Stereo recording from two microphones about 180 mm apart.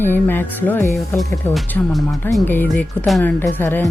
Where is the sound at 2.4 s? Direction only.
10° left (ahead or behind).